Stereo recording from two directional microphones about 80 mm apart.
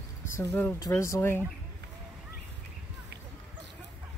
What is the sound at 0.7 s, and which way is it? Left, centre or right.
Speech, left.